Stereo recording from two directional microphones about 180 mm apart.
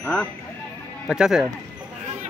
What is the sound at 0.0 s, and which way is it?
Speech, 5° left (ahead or behind).